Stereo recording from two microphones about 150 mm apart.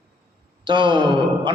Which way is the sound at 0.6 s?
30° right (ahead or behind).